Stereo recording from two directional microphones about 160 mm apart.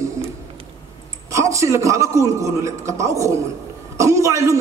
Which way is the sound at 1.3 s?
20° right (ahead or behind).